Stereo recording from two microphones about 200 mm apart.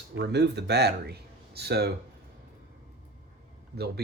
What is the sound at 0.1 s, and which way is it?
Speech, 60° right (ahead or behind).